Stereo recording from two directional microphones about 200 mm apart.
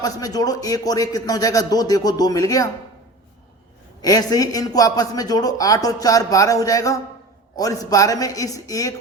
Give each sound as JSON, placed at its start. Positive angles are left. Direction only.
{"t": 0.0, "sound": "speech", "side_deg": 20}
{"t": 4.0, "sound": "speech", "side_deg": 20}